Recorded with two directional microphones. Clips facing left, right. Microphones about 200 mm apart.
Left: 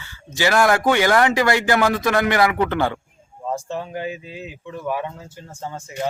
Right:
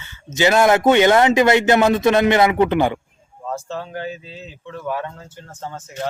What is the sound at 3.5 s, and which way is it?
Speech, 15° left (ahead or behind).